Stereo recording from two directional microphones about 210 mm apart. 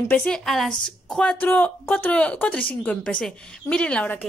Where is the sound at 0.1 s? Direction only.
5° left (ahead or behind).